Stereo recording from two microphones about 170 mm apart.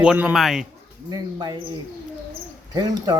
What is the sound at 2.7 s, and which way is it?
Speech, 25° right (ahead or behind).